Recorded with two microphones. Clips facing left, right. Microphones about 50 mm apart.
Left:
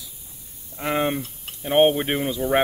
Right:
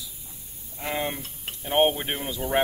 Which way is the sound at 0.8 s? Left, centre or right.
Left.